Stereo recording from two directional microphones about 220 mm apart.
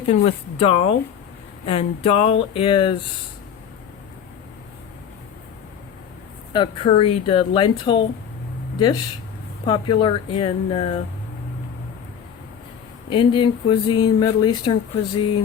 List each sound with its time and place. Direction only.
0.1 s speech: 25° left (ahead or behind)
6.5 s speech: 20° left (ahead or behind)
9.6 s speech: 20° left (ahead or behind)
13.1 s speech: 20° left (ahead or behind)